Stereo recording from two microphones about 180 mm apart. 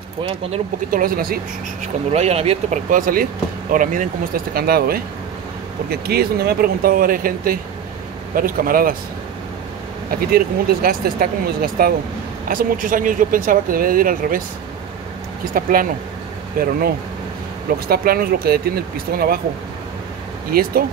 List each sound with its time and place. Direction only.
0.2 s speech: 30° right (ahead or behind)
0.8 s speech: 55° right (ahead or behind)
2.1 s speech: 35° right (ahead or behind)
2.9 s speech: 50° right (ahead or behind)
4.6 s speech: 60° right (ahead or behind)
10.3 s speech: 55° right (ahead or behind)
15.5 s speech: 50° right (ahead or behind)
17.8 s speech: 55° right (ahead or behind)
20.5 s speech: 55° right (ahead or behind)